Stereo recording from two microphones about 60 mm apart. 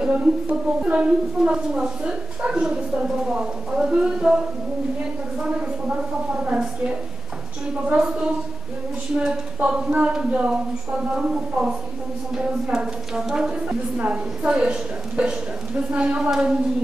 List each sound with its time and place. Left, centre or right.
0.0 s a woman's voice: centre
5.9 s a woman's voice: centre
9.1 s a woman's voice: centre